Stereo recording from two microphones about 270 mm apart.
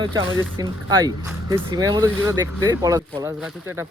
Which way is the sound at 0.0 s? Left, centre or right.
Centre.